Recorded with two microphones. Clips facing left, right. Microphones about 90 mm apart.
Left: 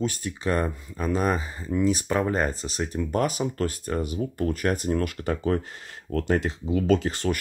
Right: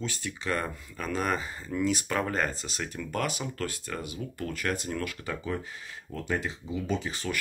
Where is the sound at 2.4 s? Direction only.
30° left (ahead or behind).